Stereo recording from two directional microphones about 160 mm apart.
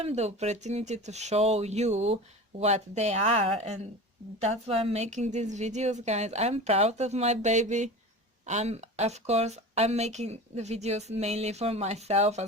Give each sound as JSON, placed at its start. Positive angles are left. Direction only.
{"t": 0.0, "sound": "speech", "side_deg": -40}